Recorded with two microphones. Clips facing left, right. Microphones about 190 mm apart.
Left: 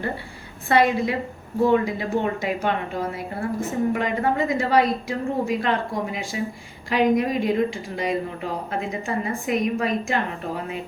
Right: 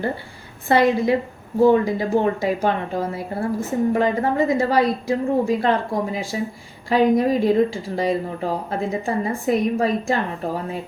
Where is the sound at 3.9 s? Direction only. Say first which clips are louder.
Right 3 dB; 30° right (ahead or behind).